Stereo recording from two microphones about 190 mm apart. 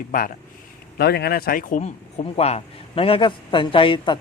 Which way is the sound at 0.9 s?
55° left (ahead or behind).